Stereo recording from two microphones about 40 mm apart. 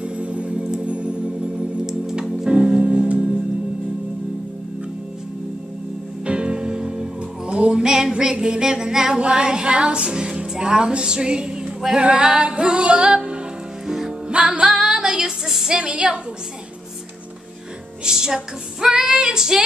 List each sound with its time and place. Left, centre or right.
0.0 s organ: right
1.9 s music: centre
2.4 s music: right
6.2 s music: right
14.3 s music: right
15.2 s a sound: centre
15.8 s music: right
18.0 s female singing: centre